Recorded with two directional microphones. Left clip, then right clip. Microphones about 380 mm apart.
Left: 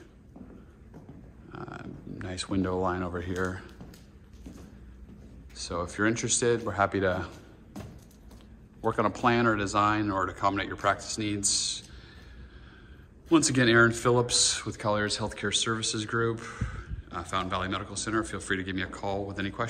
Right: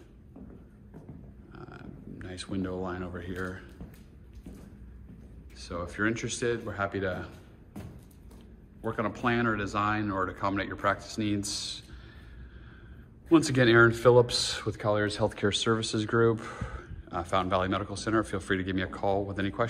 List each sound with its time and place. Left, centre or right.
1.5 s speech: centre
5.6 s speech: centre
8.8 s speech: centre
13.3 s speech: centre